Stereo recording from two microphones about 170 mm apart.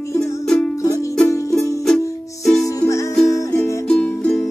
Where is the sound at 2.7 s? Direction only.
20° left (ahead or behind).